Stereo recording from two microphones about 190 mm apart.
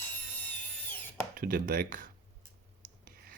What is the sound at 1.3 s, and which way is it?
Speech, 50° right (ahead or behind).